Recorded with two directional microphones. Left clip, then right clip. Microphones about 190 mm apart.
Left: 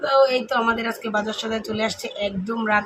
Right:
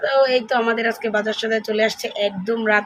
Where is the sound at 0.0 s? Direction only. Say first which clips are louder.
Right 1 dB; 10° right (ahead or behind).